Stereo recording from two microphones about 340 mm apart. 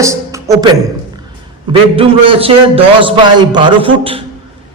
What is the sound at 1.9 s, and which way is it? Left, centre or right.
A woman's voice, centre.